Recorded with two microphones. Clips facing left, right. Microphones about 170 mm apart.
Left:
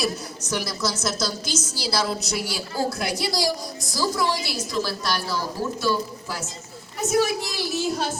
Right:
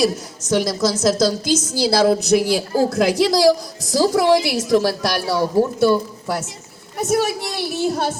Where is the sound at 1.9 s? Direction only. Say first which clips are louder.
Right 11 dB; 60° right (ahead or behind).